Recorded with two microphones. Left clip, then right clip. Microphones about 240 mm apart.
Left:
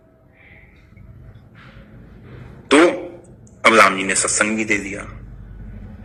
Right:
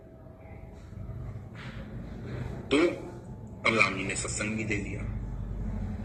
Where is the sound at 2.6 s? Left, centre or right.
Left.